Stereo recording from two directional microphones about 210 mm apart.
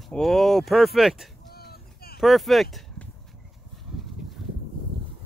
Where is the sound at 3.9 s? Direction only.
5° right (ahead or behind).